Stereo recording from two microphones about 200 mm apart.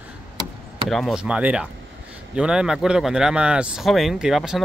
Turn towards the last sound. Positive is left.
turn(degrees=0)  # may be behind; listen again after turning